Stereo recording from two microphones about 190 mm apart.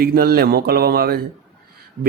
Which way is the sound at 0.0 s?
55° right (ahead or behind).